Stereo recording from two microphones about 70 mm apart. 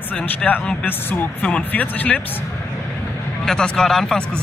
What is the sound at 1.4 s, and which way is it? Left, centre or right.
Speech, centre.